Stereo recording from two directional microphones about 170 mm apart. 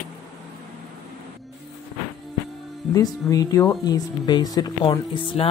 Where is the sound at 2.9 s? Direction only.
20° left (ahead or behind).